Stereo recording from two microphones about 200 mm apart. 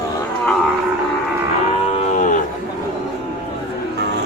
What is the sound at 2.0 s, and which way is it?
Cattle, 35° left (ahead or behind).